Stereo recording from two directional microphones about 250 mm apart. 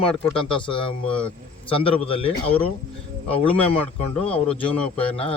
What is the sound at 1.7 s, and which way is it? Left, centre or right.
Speech, left.